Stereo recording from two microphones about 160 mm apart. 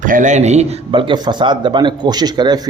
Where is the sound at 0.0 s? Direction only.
55° right (ahead or behind).